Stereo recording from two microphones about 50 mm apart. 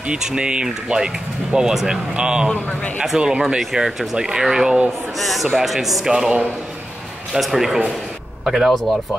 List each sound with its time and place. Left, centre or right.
0.0 s speech: centre
5.2 s speech: centre